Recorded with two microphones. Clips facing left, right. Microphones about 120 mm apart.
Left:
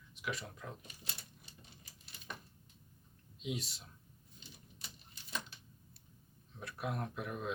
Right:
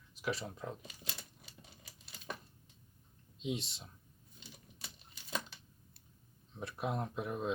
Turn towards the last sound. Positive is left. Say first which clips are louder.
# right 3 dB
turn(degrees=-25)  # may be behind; listen again after turning